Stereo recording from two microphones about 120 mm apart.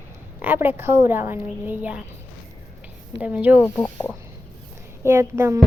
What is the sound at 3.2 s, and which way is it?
Speech, 10° right (ahead or behind).